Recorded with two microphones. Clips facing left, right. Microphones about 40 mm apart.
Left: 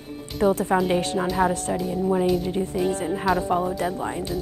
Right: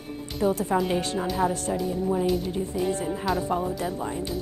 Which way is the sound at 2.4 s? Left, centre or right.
Left.